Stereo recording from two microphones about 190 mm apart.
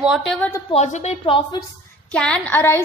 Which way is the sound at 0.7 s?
35° left (ahead or behind).